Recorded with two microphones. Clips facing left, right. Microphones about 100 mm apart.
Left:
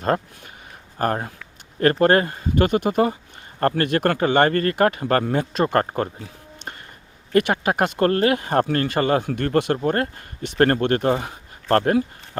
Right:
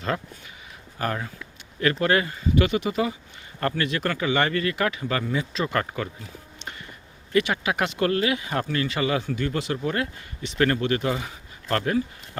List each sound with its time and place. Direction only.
0.0 s speech: 45° left (ahead or behind)
7.3 s speech: 50° left (ahead or behind)